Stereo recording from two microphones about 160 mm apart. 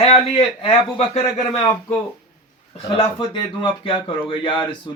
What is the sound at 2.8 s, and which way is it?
Speech, 35° left (ahead or behind).